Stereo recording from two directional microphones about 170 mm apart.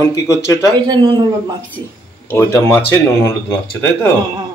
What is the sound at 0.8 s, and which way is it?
Speech, 25° right (ahead or behind).